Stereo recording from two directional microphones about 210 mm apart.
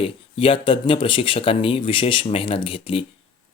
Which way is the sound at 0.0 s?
25° left (ahead or behind).